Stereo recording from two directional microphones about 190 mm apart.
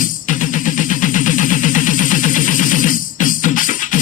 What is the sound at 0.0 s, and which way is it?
Music, 45° left (ahead or behind).